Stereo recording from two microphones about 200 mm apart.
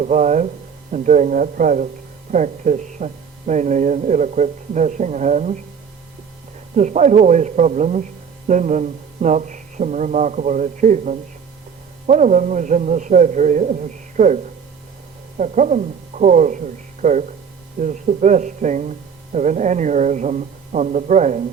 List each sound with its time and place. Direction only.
0.0 s speech: 35° right (ahead or behind)
6.7 s speech: 35° right (ahead or behind)